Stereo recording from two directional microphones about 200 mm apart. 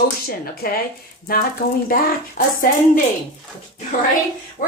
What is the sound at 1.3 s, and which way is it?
A woman's voice, 50° left (ahead or behind).